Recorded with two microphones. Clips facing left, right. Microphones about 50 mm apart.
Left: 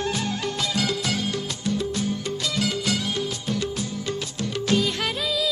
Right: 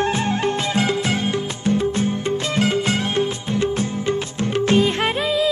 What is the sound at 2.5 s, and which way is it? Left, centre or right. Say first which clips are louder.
Music: right 6 dB; right.